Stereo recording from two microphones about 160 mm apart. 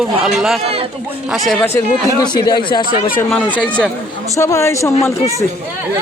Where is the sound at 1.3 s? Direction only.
Centre (ahead or behind).